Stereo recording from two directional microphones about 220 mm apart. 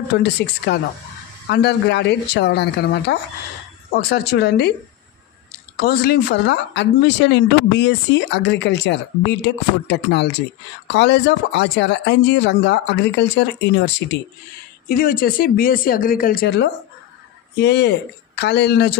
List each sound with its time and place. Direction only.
0.1 s speech: 50° left (ahead or behind)
5.8 s speech: 45° left (ahead or behind)
14.9 s speech: 40° left (ahead or behind)